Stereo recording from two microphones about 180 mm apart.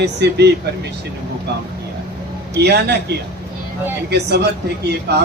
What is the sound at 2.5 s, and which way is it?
Speech, 65° right (ahead or behind).